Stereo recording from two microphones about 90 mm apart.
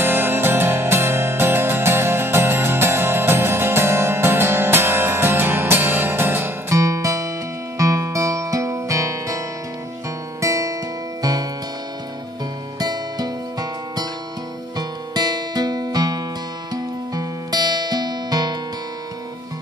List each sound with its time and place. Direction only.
0.0 s music: 25° right (ahead or behind)
6.8 s music: 35° right (ahead or behind)
10.4 s music: 35° right (ahead or behind)
12.7 s music: 45° right (ahead or behind)